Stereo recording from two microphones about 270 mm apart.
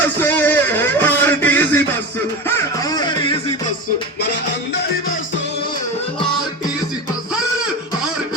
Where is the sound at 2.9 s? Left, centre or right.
Centre.